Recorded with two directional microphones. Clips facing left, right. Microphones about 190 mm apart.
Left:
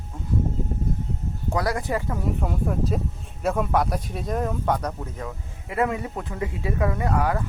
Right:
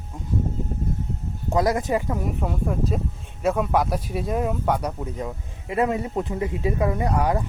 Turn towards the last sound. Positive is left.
turn(degrees=-20)  # may be behind; listen again after turning